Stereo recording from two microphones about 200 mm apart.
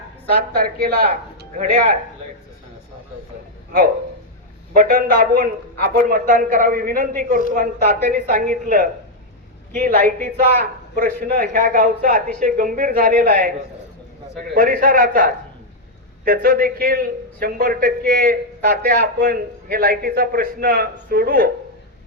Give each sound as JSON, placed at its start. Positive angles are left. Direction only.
{"t": 0.3, "sound": "a man's voice", "side_deg": -45}
{"t": 4.7, "sound": "a man's voice", "side_deg": -40}
{"t": 14.5, "sound": "a man's voice", "side_deg": -45}